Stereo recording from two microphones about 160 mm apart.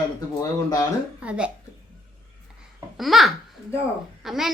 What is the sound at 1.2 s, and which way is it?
Speech, 5° right (ahead or behind).